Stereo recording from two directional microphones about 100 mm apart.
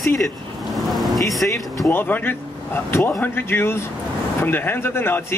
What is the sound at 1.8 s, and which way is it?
Speech, 20° left (ahead or behind).